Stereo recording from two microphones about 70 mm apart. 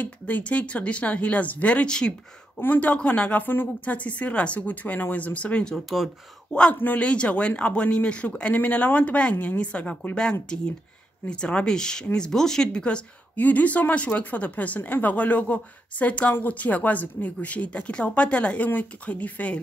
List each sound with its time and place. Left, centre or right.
0.0 s speech: left
2.6 s a man's voice: left